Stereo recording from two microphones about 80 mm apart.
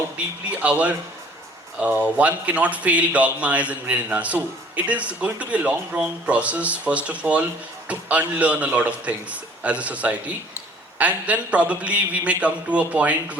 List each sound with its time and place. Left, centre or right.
0.5 s a man's voice: centre